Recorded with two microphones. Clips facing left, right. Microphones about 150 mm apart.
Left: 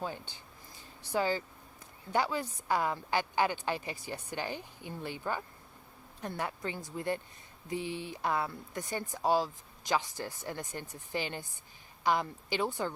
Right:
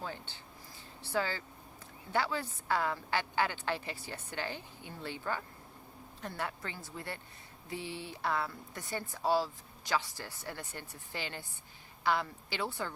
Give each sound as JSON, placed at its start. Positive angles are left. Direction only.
{"t": 0.0, "sound": "speech", "side_deg": 15}